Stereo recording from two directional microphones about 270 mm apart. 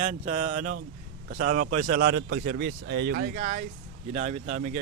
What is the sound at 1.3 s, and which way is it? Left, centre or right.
Speech, right.